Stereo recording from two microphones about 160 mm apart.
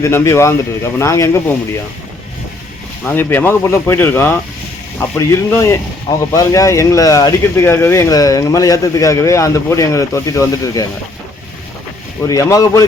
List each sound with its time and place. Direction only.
0.0 s speech: 15° left (ahead or behind)
3.0 s speech: 10° left (ahead or behind)
12.2 s speech: 20° left (ahead or behind)